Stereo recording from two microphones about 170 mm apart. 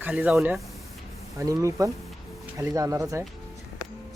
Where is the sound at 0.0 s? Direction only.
10° right (ahead or behind).